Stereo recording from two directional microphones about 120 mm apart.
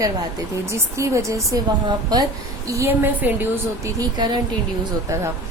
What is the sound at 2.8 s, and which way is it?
A woman's voice, 15° right (ahead or behind).